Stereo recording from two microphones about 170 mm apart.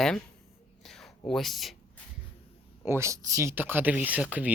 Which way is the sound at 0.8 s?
5° left (ahead or behind).